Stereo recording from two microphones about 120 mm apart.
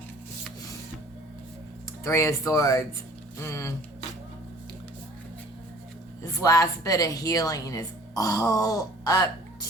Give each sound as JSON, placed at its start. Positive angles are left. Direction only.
{"t": 2.0, "sound": "a woman's voice", "side_deg": 25}
{"t": 6.2, "sound": "a woman's voice", "side_deg": 30}